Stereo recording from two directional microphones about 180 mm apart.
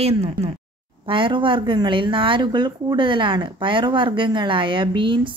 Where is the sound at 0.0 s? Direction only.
35° right (ahead or behind).